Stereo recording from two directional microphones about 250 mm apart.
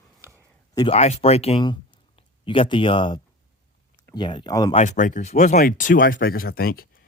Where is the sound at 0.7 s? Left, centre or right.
Centre.